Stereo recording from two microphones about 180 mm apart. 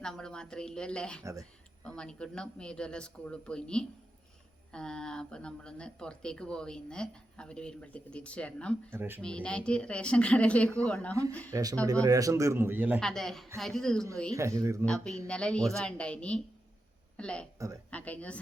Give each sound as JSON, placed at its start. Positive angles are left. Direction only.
{"t": 0.0, "sound": "speech", "side_deg": 5}
{"t": 1.2, "sound": "a man's voice", "side_deg": -15}
{"t": 1.8, "sound": "speech", "side_deg": 5}
{"t": 8.9, "sound": "a man's voice", "side_deg": -10}
{"t": 9.2, "sound": "speech", "side_deg": 5}
{"t": 11.5, "sound": "a man's voice", "side_deg": -20}
{"t": 13.0, "sound": "speech", "side_deg": 0}
{"t": 14.3, "sound": "a man's voice", "side_deg": -15}
{"t": 14.8, "sound": "speech", "side_deg": 5}